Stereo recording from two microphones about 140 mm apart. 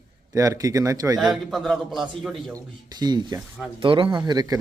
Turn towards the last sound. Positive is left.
turn(degrees=-30)  # may be behind; listen again after turning